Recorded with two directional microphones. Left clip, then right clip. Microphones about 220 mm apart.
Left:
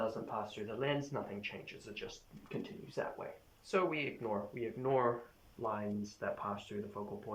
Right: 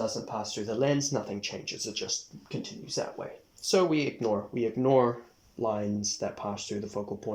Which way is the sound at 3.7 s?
25° right (ahead or behind).